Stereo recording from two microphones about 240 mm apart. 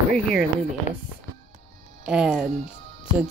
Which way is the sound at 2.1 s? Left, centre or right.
Centre.